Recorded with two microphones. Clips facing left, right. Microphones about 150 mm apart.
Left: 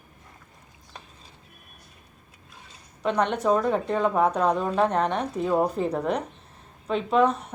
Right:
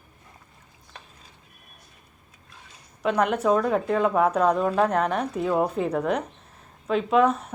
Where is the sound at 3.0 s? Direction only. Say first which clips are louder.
Right 1 dB; 5° right (ahead or behind).